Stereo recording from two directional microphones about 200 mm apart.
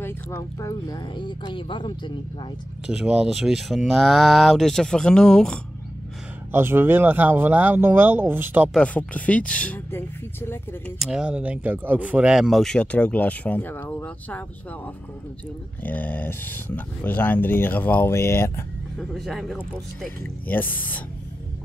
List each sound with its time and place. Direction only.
0.0 s speech: 15° left (ahead or behind)
2.9 s speech: 5° right (ahead or behind)
6.5 s speech: 10° right (ahead or behind)
8.7 s speech: 5° left (ahead or behind)
11.0 s speech: 5° right (ahead or behind)
15.8 s speech: 10° left (ahead or behind)
19.1 s speech: centre (ahead or behind)